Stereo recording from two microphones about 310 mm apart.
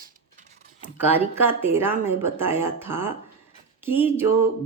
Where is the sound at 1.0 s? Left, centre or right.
Centre.